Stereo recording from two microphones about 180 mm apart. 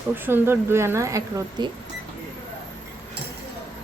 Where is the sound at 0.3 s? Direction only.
10° right (ahead or behind).